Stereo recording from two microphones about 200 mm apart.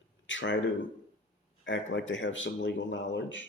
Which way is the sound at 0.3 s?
70° left (ahead or behind).